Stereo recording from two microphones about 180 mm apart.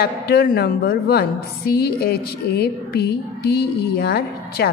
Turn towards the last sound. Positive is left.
turn(degrees=60)  # may be behind; listen again after turning